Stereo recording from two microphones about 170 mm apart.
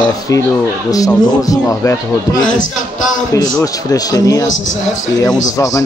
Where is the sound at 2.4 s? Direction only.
50° left (ahead or behind).